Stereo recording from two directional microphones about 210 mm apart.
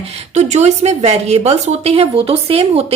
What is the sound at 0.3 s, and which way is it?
A woman's voice, 35° right (ahead or behind).